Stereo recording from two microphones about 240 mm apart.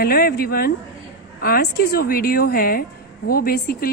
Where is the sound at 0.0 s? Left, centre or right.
Left.